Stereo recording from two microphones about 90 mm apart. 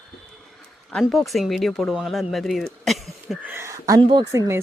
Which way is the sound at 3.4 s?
25° right (ahead or behind).